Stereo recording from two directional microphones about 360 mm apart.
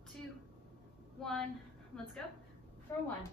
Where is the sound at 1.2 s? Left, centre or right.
Centre.